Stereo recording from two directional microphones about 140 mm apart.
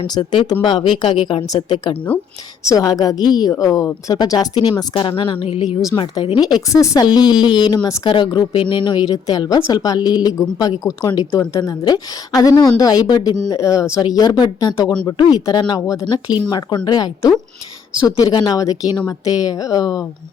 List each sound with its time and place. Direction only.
0.1 s a woman's voice: 35° left (ahead or behind)
2.6 s a woman's voice: 25° left (ahead or behind)
5.9 s a woman's voice: 20° left (ahead or behind)
6.2 s a woman's voice: 35° left (ahead or behind)